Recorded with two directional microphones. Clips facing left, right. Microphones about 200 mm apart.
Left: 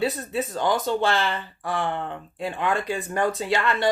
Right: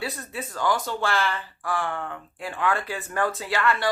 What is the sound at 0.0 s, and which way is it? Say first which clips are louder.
Speech: left 7 dB; 20° left (ahead or behind).